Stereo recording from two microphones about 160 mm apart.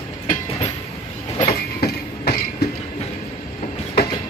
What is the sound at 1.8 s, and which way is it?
Train, 75° left (ahead or behind).